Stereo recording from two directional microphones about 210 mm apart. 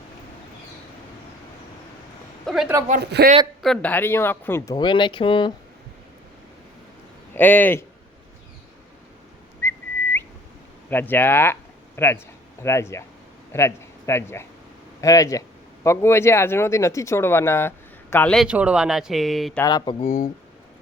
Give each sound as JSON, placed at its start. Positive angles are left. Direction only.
{"t": 2.5, "sound": "speech", "side_deg": 0}
{"t": 3.0, "sound": "a man's voice", "side_deg": -50}
{"t": 3.6, "sound": "speech", "side_deg": 5}
{"t": 7.3, "sound": "speech", "side_deg": 10}
{"t": 9.6, "sound": "whistling", "side_deg": 10}
{"t": 10.8, "sound": "a man's voice", "side_deg": 10}
{"t": 19.6, "sound": "speech", "side_deg": 20}